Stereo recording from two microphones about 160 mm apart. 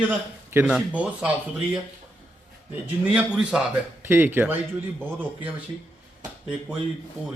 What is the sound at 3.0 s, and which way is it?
Speech, 10° right (ahead or behind).